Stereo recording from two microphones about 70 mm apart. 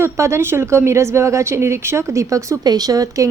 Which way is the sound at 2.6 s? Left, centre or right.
Right.